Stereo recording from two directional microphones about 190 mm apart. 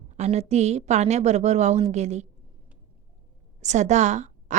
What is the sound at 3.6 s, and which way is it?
Speech, 35° right (ahead or behind).